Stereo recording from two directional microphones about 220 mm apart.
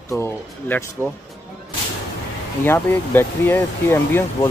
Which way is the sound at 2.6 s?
10° left (ahead or behind).